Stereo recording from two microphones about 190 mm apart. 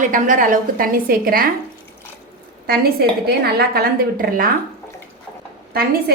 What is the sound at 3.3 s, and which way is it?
A woman's voice, 55° right (ahead or behind).